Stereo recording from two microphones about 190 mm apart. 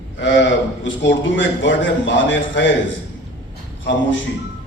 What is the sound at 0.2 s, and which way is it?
A man's voice, 70° left (ahead or behind).